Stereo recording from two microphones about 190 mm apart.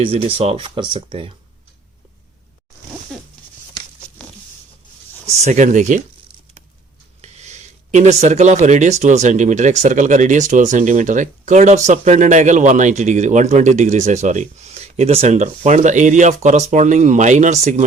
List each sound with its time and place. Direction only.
0.0 s speech: 30° right (ahead or behind)
3.1 s a sound: 5° left (ahead or behind)
5.3 s speech: 35° right (ahead or behind)
7.2 s speech: 35° right (ahead or behind)